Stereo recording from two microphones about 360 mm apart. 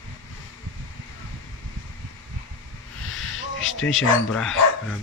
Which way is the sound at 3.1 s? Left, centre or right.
Left.